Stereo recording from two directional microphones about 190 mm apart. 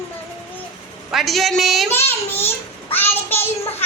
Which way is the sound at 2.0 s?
10° left (ahead or behind).